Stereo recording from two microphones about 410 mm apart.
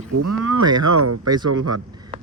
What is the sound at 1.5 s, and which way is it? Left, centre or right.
Speech, right.